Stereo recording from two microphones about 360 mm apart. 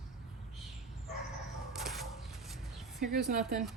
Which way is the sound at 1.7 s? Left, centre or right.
Centre.